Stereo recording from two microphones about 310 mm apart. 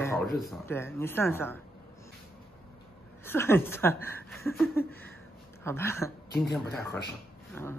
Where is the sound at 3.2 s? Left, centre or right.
Centre.